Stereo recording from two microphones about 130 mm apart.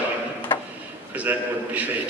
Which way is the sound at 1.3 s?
15° right (ahead or behind).